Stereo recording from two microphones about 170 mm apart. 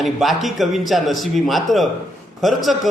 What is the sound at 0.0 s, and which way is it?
A man's voice, centre (ahead or behind).